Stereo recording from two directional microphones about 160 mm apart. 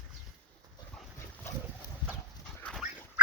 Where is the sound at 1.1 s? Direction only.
15° left (ahead or behind).